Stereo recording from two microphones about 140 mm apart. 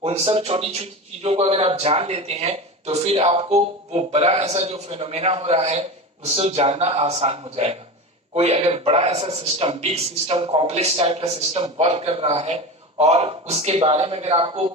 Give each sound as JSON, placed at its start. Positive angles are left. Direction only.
{"t": 0.0, "sound": "a man's voice", "side_deg": -45}